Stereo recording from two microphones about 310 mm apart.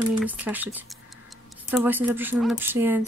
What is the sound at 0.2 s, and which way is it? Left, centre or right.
Speech, centre.